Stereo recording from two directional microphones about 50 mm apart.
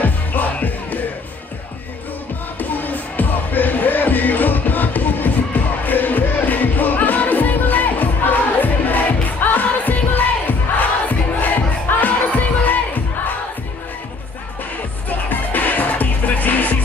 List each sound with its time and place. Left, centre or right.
0.0 s music: left
2.7 s music: left
15.0 s music: left